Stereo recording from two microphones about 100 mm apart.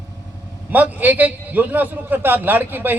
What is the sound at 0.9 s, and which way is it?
A man's voice, 15° right (ahead or behind).